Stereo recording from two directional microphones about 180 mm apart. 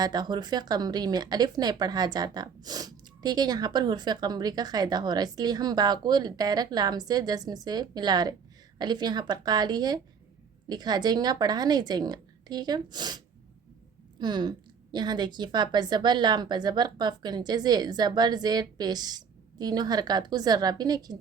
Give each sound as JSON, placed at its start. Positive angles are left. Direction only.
{"t": 0.0, "sound": "speech", "side_deg": -25}